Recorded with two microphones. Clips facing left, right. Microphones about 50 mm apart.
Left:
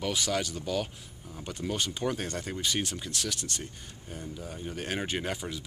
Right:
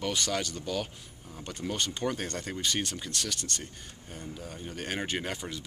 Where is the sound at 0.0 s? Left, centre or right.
Centre.